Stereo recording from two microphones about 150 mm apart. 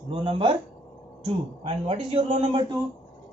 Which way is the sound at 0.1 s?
35° right (ahead or behind).